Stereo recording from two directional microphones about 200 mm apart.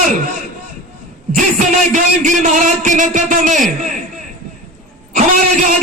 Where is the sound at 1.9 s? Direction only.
40° right (ahead or behind).